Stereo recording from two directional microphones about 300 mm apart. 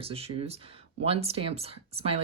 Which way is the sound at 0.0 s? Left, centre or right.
Centre.